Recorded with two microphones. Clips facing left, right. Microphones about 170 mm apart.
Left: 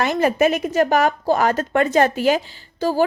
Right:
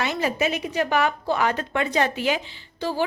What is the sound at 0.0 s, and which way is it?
A woman's voice, 50° left (ahead or behind).